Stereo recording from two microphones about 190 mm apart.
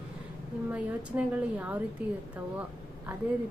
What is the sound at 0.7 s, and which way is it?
A woman's voice, 5° right (ahead or behind).